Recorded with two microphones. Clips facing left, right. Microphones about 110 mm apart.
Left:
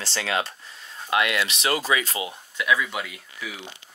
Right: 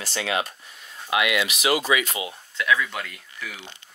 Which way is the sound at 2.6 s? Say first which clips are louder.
Even; 10° left (ahead or behind).